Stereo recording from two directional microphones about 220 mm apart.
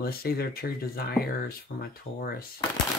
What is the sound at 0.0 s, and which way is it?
Speech, 45° left (ahead or behind).